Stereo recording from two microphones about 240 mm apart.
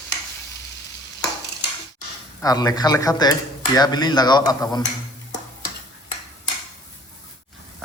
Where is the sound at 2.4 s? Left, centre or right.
Centre.